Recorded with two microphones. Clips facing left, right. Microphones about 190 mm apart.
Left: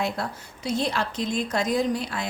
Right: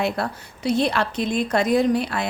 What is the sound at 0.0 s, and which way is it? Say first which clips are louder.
Speech: right 4 dB; 65° right (ahead or behind).